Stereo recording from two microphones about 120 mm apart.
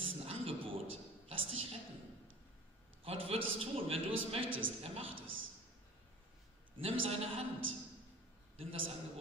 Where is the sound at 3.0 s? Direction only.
55° right (ahead or behind).